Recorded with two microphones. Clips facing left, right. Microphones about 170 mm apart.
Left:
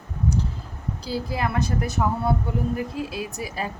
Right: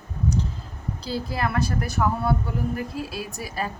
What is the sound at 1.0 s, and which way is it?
A woman's voice, 10° left (ahead or behind).